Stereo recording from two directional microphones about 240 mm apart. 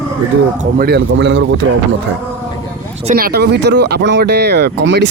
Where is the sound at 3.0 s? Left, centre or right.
Right.